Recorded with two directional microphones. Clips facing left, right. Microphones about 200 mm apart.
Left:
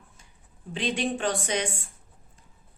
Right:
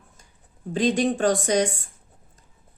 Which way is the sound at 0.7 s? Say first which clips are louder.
Right 7 dB; 40° right (ahead or behind).